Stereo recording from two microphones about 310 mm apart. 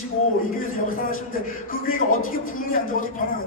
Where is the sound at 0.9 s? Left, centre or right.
Left.